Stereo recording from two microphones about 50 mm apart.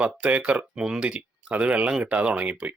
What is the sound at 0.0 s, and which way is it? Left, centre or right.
Speech, right.